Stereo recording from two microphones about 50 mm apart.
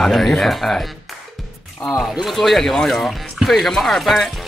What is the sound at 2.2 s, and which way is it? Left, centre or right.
Speech, centre.